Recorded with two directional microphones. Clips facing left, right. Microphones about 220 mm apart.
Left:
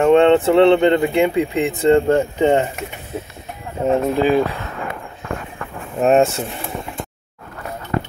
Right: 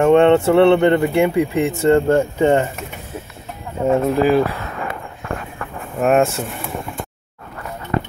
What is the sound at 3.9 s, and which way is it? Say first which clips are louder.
Speech: right 1 dB; 25° left (ahead or behind).